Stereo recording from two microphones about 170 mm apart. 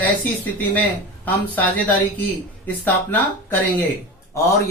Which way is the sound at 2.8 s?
10° left (ahead or behind).